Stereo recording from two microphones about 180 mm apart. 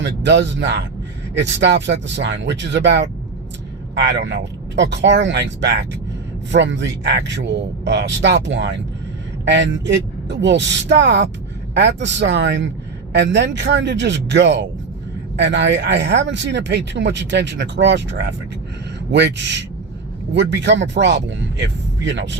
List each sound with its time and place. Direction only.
0.0 s speech: 75° right (ahead or behind)
4.7 s speech: 75° right (ahead or behind)